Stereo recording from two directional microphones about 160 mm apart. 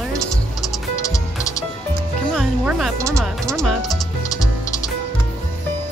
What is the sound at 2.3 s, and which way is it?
Music, centre (ahead or behind).